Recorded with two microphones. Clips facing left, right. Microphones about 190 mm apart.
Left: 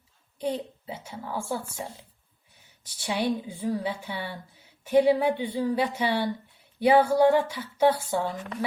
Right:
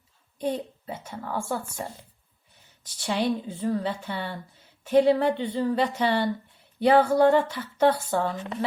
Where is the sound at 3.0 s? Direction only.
10° left (ahead or behind).